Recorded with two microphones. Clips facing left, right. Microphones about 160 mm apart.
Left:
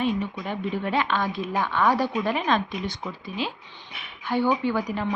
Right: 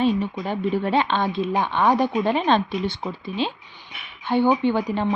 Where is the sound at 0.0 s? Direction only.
30° right (ahead or behind).